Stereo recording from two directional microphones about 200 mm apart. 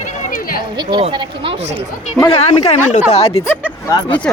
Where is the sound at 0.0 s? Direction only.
40° left (ahead or behind).